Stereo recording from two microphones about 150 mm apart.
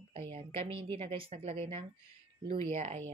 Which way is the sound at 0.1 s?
45° right (ahead or behind).